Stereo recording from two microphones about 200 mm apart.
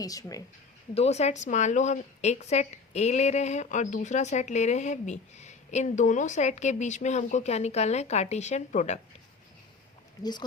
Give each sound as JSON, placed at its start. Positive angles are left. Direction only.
{"t": 0.0, "sound": "speech", "side_deg": 15}
{"t": 0.9, "sound": "a woman's voice", "side_deg": 35}